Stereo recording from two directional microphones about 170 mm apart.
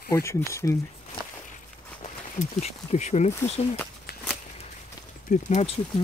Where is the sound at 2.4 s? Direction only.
40° left (ahead or behind).